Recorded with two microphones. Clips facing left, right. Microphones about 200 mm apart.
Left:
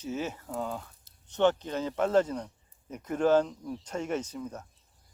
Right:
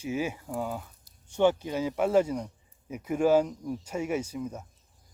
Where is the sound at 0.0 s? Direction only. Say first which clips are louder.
Right 3 dB; 10° right (ahead or behind).